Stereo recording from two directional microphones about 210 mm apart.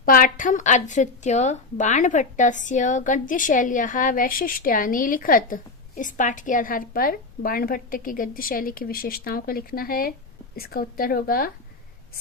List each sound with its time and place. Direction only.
0.0 s a woman's voice: 40° left (ahead or behind)